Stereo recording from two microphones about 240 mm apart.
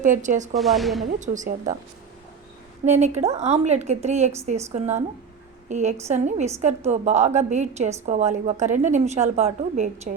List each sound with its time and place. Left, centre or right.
0.0 s a woman's voice: right
0.5 s speech: centre
1.2 s a woman's voice: right
2.8 s a woman's voice: right